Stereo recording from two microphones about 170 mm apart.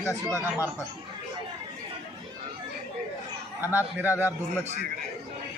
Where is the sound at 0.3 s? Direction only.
15° right (ahead or behind).